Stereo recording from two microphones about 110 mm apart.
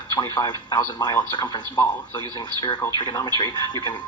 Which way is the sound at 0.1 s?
40° left (ahead or behind).